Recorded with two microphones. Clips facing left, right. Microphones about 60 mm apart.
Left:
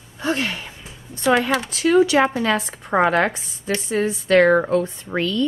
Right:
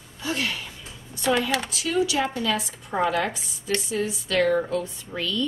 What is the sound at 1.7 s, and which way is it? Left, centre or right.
A woman's voice, left.